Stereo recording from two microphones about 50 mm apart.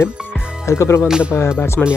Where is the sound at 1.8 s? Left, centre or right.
Centre.